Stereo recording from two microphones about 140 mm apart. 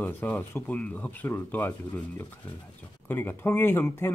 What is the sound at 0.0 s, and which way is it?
Speech, 10° left (ahead or behind).